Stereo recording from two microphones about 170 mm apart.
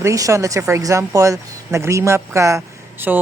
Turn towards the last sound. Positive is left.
turn(degrees=-15)  # may be behind; listen again after turning